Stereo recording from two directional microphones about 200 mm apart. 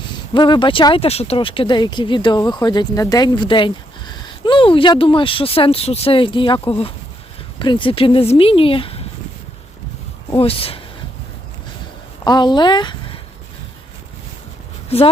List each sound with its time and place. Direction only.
0.3 s speech: 25° left (ahead or behind)
10.2 s speech: 30° left (ahead or behind)
12.2 s speech: 20° left (ahead or behind)
14.8 s speech: 30° left (ahead or behind)